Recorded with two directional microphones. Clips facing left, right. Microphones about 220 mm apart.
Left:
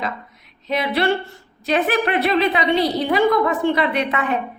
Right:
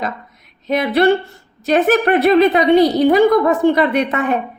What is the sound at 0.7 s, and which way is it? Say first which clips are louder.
A woman's voice: right 6 dB; 45° right (ahead or behind).